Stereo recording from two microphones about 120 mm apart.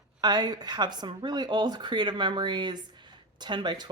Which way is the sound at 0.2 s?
35° right (ahead or behind).